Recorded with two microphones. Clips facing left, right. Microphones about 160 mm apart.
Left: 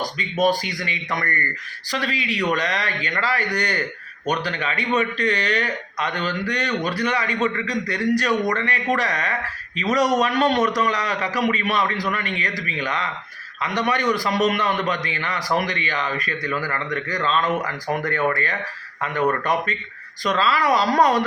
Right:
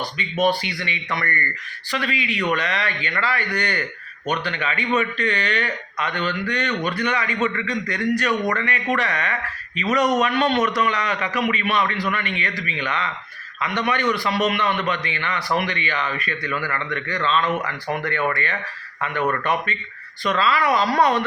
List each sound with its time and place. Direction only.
0.0 s a man's voice: 40° left (ahead or behind)